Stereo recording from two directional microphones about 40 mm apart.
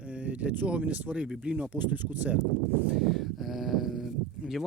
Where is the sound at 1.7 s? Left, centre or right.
Right.